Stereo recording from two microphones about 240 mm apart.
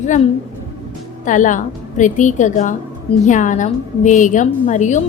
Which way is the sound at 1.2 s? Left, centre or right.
Left.